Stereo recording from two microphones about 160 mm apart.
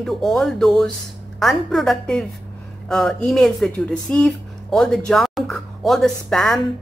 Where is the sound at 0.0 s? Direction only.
Centre (ahead or behind).